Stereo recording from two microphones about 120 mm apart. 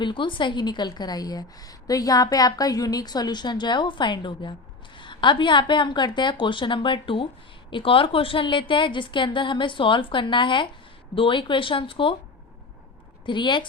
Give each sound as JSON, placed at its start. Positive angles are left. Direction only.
{"t": 0.0, "sound": "a woman's voice", "side_deg": 45}
{"t": 13.2, "sound": "a woman's voice", "side_deg": 40}